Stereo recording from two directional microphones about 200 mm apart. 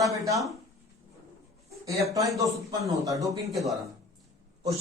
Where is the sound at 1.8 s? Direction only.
15° right (ahead or behind).